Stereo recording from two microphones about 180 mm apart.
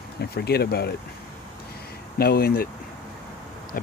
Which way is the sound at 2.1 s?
55° left (ahead or behind).